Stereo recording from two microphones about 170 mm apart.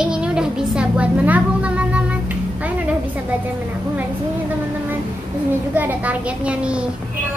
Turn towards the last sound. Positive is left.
turn(degrees=-5)  # may be behind; listen again after turning